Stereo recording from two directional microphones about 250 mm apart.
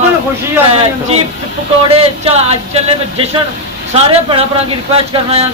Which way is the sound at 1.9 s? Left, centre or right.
Right.